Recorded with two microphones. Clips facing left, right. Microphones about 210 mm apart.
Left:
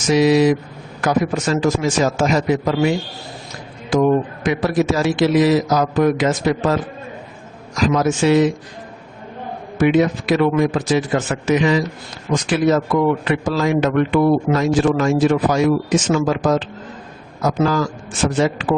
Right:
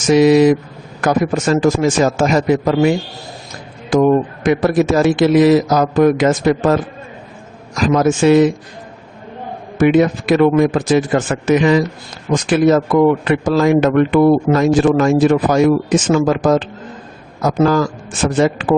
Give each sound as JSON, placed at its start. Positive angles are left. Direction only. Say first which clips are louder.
{"t": 0.1, "sound": "speech", "louder": "right 4 dB", "side_deg": -50}
{"t": 7.8, "sound": "speech", "louder": "right 3 dB", "side_deg": -50}
{"t": 9.7, "sound": "speech", "louder": "right 3 dB", "side_deg": -50}